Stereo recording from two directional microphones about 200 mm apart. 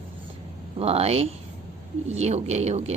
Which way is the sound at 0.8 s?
30° right (ahead or behind).